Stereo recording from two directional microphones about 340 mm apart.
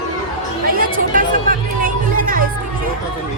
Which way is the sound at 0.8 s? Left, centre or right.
Right.